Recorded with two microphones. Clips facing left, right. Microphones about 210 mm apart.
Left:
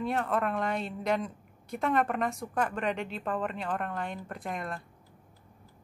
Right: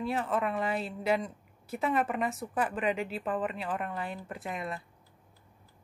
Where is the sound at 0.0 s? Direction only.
Centre (ahead or behind).